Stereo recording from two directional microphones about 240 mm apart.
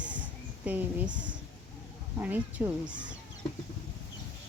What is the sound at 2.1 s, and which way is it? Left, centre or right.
Speech, centre.